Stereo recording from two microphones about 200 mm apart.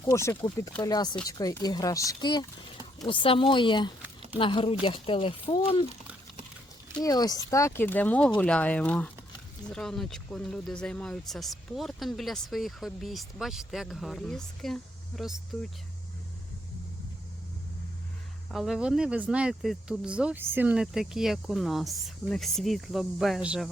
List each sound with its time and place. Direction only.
0.0 s speech: 15° left (ahead or behind)
7.0 s speech: 20° left (ahead or behind); by 15.7 s centre (ahead or behind)
18.5 s speech: centre (ahead or behind)